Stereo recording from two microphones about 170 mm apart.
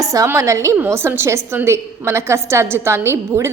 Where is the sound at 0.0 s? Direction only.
20° right (ahead or behind).